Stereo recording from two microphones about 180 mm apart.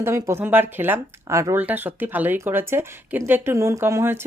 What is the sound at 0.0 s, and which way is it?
Speech, 15° right (ahead or behind).